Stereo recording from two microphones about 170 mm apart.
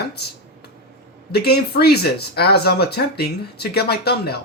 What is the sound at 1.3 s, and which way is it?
Speech, 70° left (ahead or behind).